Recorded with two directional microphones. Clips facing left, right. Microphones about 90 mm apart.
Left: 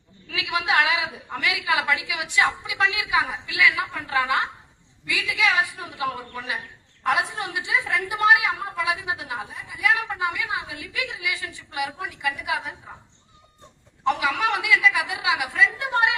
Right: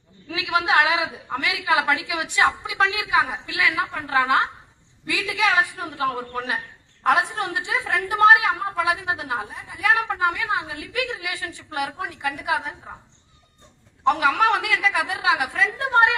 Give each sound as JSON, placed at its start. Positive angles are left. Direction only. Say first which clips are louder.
{"t": 0.3, "sound": "a woman's voice", "louder": "right 3 dB", "side_deg": -30}